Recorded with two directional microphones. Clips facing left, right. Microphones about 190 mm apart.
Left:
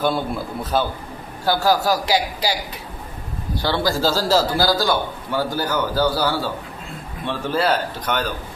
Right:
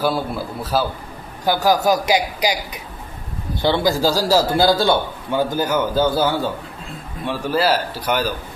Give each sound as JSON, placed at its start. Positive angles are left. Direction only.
{"t": 0.0, "sound": "a man's voice", "side_deg": -5}
{"t": 1.5, "sound": "a man's voice", "side_deg": -15}
{"t": 3.6, "sound": "a man's voice", "side_deg": -20}
{"t": 4.4, "sound": "a man's voice", "side_deg": -25}
{"t": 7.3, "sound": "a man's voice", "side_deg": -5}